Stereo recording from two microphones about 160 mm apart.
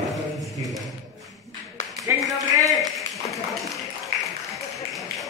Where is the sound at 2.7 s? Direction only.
Centre (ahead or behind).